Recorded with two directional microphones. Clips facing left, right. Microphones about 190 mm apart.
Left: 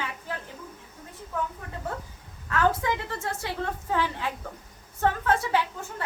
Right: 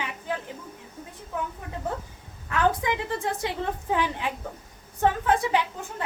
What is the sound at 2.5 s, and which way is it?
A woman's voice, 15° right (ahead or behind).